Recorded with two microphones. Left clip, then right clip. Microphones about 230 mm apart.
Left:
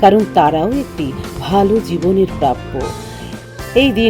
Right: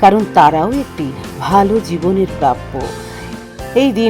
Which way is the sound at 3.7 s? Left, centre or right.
Right.